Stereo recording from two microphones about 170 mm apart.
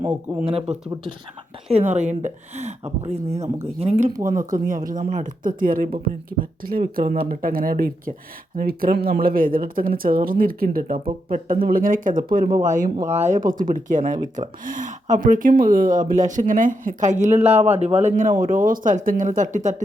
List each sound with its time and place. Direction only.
0.1 s speech: 5° right (ahead or behind)
0.5 s speech: 35° right (ahead or behind)
4.4 s speech: 55° right (ahead or behind)